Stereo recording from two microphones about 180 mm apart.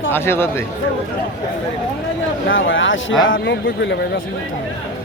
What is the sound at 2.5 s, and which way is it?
A man's voice, 90° left.